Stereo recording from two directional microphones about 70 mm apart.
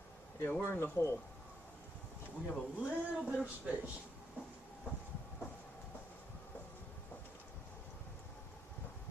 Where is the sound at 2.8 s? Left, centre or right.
Centre.